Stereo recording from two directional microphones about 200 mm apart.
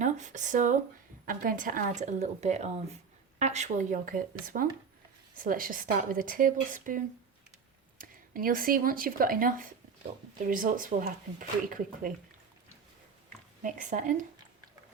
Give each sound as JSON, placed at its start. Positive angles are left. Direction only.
{"t": 0.0, "sound": "a woman's voice", "side_deg": -35}
{"t": 13.6, "sound": "a woman's voice", "side_deg": -40}